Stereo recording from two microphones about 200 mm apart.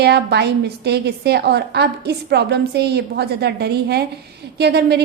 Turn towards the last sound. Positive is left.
turn(degrees=-55)  # may be behind; listen again after turning